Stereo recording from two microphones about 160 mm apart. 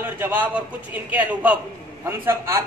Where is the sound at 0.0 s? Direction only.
10° right (ahead or behind).